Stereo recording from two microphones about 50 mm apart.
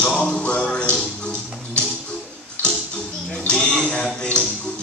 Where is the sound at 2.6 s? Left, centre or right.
Left.